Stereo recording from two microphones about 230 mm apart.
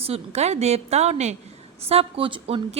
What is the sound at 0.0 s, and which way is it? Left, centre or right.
A woman's voice, right.